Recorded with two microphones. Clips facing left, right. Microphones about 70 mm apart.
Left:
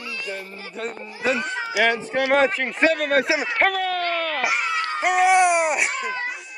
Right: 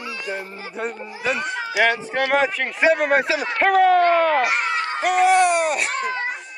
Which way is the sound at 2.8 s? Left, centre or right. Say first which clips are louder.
Right 2 dB; centre.